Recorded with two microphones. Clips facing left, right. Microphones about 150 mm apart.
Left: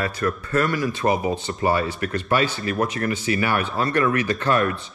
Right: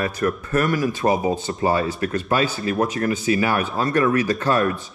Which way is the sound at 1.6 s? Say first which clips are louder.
Right 1 dB; 30° right (ahead or behind).